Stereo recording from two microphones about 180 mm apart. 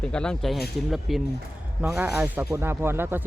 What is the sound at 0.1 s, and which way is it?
Speech, 5° left (ahead or behind).